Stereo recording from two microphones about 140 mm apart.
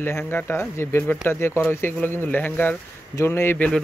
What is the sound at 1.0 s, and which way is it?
Speech, 5° left (ahead or behind).